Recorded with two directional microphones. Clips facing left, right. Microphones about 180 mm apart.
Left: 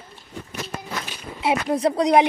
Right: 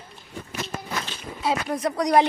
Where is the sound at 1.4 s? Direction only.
25° left (ahead or behind).